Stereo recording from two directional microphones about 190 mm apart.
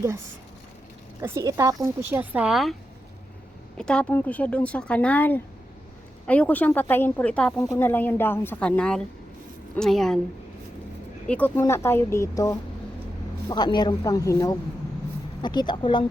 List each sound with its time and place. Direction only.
1.2 s speech: 15° right (ahead or behind)
3.8 s a woman's voice: 5° left (ahead or behind)
11.3 s speech: 10° left (ahead or behind); by 16.0 s 25° left (ahead or behind)